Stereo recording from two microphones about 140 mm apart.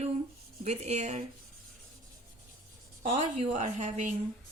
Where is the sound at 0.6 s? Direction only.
50° right (ahead or behind).